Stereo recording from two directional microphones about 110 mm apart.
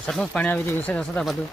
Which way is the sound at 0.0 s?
5° left (ahead or behind).